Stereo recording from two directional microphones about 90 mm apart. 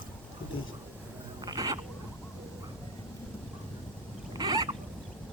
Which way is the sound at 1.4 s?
45° right (ahead or behind).